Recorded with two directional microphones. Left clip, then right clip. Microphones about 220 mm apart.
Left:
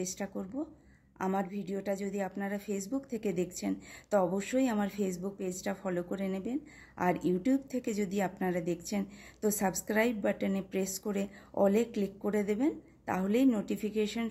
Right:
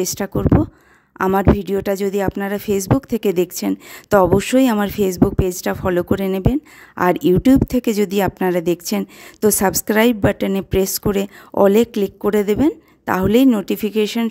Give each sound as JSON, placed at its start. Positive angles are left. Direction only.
{"t": 0.0, "sound": "a woman's voice", "side_deg": -55}